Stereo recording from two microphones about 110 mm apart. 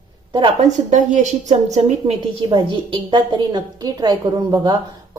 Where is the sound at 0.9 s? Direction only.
90° right.